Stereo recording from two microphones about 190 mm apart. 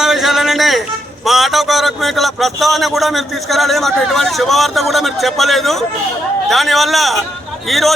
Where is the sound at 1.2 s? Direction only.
Centre (ahead or behind).